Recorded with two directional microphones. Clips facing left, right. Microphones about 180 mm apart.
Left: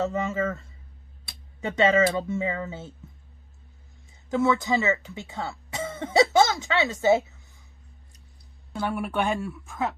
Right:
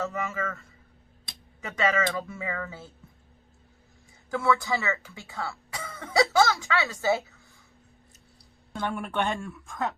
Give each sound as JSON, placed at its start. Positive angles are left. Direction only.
{"t": 0.0, "sound": "speech", "side_deg": 20}
{"t": 4.3, "sound": "speech", "side_deg": 20}
{"t": 8.7, "sound": "speech", "side_deg": 5}